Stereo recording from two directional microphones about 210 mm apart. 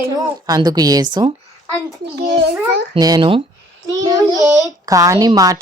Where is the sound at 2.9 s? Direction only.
20° right (ahead or behind).